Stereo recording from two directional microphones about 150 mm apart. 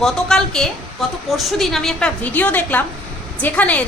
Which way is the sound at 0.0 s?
5° left (ahead or behind).